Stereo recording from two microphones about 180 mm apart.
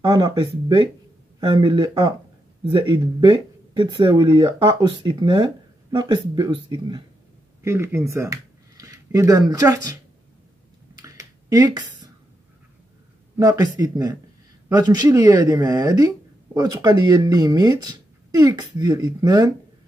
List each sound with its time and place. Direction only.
0.0 s speech: 25° right (ahead or behind)
11.0 s a sound: 20° right (ahead or behind)
13.4 s speech: 20° right (ahead or behind)